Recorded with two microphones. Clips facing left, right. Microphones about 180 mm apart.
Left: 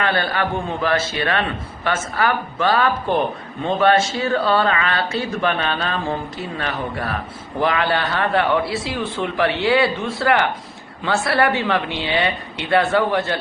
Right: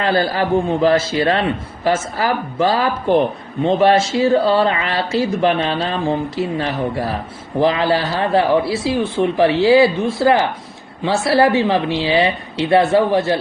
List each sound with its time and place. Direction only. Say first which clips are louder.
0.0 s a man's voice: right 4 dB; 30° right (ahead or behind)